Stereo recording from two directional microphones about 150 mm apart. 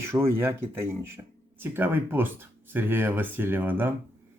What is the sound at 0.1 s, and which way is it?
Speech, 15° right (ahead or behind).